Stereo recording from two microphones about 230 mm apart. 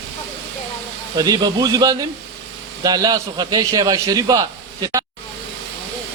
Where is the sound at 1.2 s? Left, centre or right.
Centre.